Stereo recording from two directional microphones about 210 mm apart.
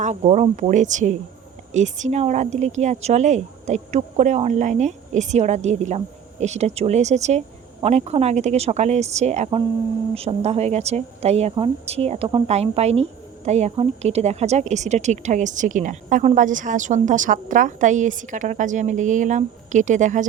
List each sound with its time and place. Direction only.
0.0 s speech: 35° right (ahead or behind)